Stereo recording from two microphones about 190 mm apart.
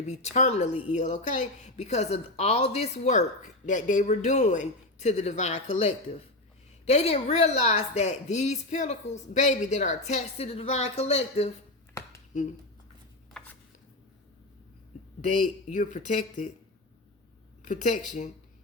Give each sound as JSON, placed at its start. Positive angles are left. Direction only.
{"t": 0.0, "sound": "speech", "side_deg": 35}
{"t": 13.3, "sound": "a sound", "side_deg": 10}
{"t": 15.2, "sound": "speech", "side_deg": 40}
{"t": 17.6, "sound": "speech", "side_deg": 40}